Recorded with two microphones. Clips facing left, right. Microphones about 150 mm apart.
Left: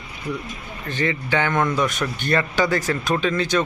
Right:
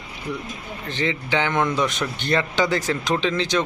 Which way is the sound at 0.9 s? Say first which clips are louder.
Left 1 dB; 15° right (ahead or behind).